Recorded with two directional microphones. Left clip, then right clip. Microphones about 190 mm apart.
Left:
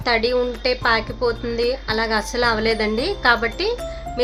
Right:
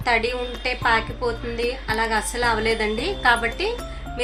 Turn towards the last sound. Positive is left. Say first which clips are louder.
# left 2 dB
turn(degrees=65)  # may be behind; listen again after turning